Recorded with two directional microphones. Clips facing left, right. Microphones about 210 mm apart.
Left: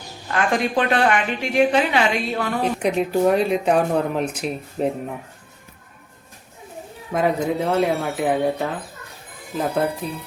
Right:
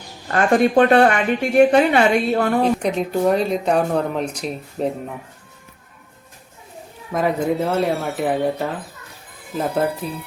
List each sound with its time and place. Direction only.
0.3 s a woman's voice: 40° right (ahead or behind)
2.8 s speech: 5° left (ahead or behind)
7.1 s speech: centre (ahead or behind)